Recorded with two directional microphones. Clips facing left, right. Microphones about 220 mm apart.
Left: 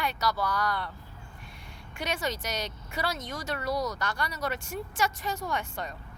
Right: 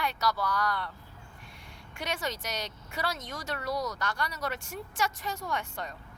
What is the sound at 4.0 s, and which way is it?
A woman's voice, 10° left (ahead or behind).